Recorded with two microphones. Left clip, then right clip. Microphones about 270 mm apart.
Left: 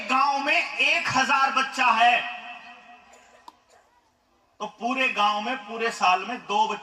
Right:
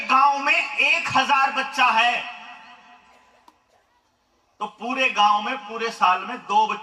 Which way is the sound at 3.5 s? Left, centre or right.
Centre.